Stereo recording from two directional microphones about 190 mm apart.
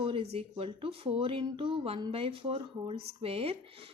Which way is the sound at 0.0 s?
30° right (ahead or behind).